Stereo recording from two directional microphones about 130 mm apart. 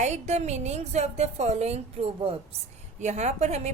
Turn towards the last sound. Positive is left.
turn(degrees=-60)  # may be behind; listen again after turning